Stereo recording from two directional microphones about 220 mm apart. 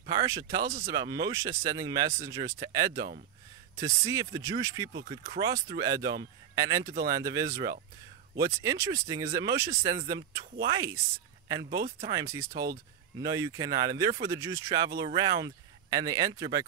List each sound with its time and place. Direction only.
0.1 s speech: 15° right (ahead or behind)
12.1 s speech: 15° right (ahead or behind)